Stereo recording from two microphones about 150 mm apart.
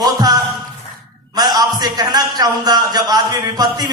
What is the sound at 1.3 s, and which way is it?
A man's voice, 25° right (ahead or behind).